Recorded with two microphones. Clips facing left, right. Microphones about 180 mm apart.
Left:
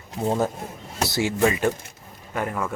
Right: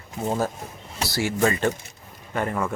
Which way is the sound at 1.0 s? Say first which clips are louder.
Left 1 dB; 20° left (ahead or behind).